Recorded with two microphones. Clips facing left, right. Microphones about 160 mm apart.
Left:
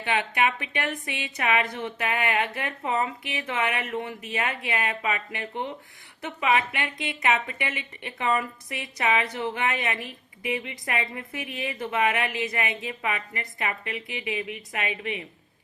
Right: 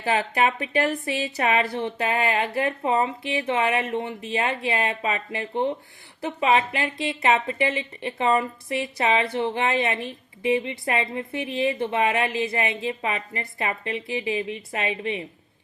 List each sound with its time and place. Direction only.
0.0 s a woman's voice: 35° right (ahead or behind)